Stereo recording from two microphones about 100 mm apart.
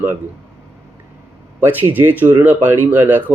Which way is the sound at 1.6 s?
20° right (ahead or behind).